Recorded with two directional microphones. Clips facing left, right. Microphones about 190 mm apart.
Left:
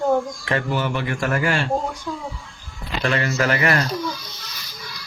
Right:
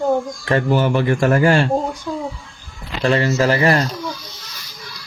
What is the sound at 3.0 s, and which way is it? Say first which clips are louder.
Speech: right 5 dB; 30° right (ahead or behind).